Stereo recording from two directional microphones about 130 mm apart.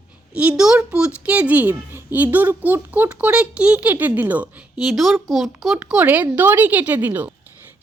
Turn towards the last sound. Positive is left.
turn(degrees=-15)  # may be behind; listen again after turning